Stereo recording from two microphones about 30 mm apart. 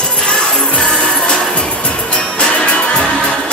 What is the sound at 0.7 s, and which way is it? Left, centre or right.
Music, left.